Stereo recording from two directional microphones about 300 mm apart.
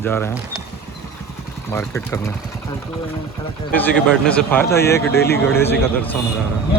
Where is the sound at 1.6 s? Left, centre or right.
Centre.